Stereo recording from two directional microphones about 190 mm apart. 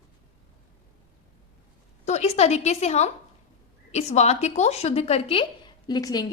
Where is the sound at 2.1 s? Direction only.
35° left (ahead or behind); by 6.2 s 20° left (ahead or behind).